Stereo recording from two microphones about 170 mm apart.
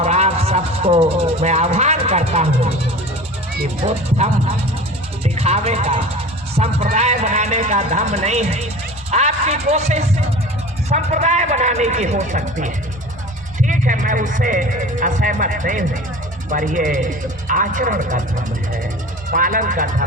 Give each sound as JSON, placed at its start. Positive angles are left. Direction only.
{"t": 0.0, "sound": "speech", "side_deg": -40}
{"t": 3.8, "sound": "speech", "side_deg": -40}